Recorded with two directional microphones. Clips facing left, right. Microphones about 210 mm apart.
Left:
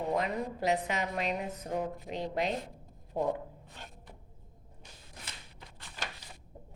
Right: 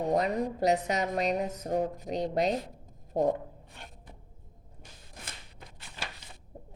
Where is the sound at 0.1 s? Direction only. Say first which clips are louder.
Right 5 dB; 40° right (ahead or behind).